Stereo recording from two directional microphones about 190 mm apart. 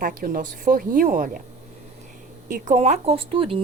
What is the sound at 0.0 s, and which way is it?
Speech, 45° right (ahead or behind).